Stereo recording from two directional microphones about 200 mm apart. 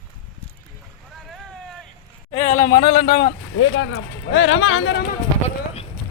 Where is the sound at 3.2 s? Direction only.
65° left (ahead or behind).